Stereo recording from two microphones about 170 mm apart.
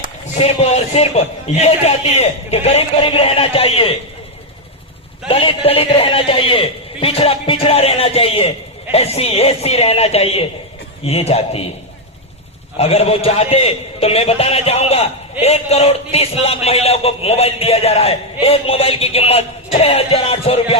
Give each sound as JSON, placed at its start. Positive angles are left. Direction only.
{"t": 0.3, "sound": "a man's voice", "side_deg": 40}
{"t": 5.3, "sound": "a man's voice", "side_deg": 35}
{"t": 12.7, "sound": "a man's voice", "side_deg": 35}